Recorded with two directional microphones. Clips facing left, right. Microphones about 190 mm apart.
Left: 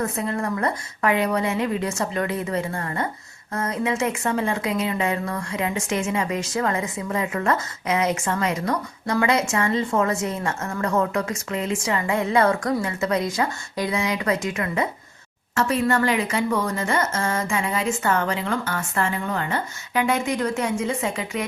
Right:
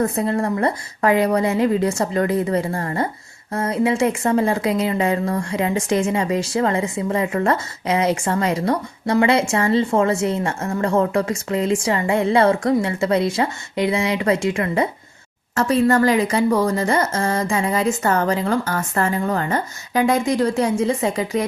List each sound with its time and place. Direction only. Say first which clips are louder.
0.0 s speech: right 5 dB; 30° right (ahead or behind)